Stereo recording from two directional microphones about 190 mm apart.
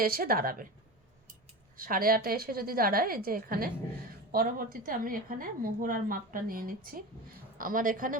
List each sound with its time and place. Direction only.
0.0 s a woman's voice: 50° right (ahead or behind)